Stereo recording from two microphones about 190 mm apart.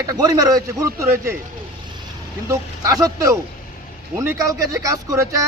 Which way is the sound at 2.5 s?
15° right (ahead or behind).